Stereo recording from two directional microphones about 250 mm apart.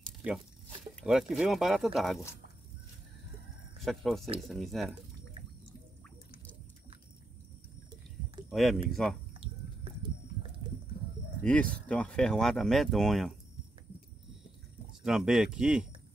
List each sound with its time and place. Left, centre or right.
0.0 s speech: centre
3.8 s speech: centre
8.5 s speech: centre
9.4 s a sound: right
11.7 s speech: centre
15.0 s speech: centre